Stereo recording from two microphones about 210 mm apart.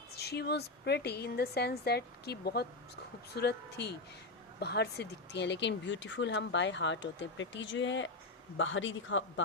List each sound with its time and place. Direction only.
0.2 s a woman's voice: 50° left (ahead or behind)